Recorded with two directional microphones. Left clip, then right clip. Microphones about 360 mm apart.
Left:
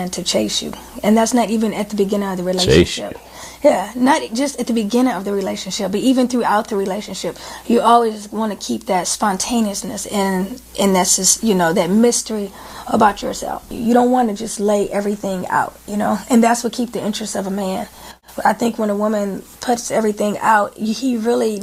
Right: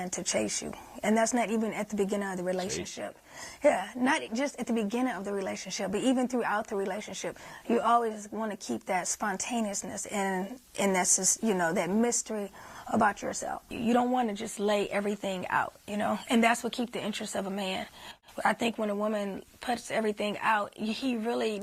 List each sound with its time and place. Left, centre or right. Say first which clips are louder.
0.0 s a woman's voice: left 12 dB; right
3.6 s a woman's voice: left 12 dB; right
14.8 s a woman's voice: left 11 dB; right
17.2 s a woman's voice: left 11 dB; right; by 21.6 s centre